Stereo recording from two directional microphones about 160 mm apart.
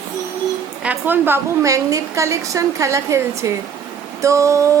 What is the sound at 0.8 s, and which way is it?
A woman's voice, 10° right (ahead or behind).